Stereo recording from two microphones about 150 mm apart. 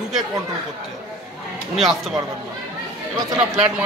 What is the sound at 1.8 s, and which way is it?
Speech, centre (ahead or behind).